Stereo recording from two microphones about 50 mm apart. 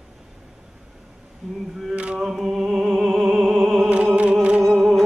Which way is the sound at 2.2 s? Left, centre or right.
Centre.